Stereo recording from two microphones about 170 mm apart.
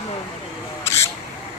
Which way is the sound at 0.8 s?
15° left (ahead or behind).